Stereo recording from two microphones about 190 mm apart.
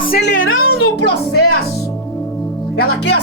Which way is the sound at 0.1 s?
65° left (ahead or behind).